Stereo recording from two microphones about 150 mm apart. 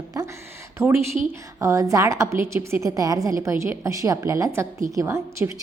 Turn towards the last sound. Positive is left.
turn(degrees=-20)  # may be behind; listen again after turning